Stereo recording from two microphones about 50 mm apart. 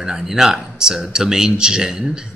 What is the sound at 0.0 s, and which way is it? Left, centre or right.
A man's voice, centre.